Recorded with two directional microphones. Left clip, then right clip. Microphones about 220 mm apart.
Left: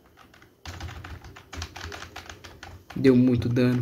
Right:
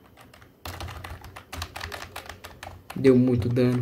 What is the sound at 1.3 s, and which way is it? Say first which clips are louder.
Typing: right 2 dB; 50° right (ahead or behind).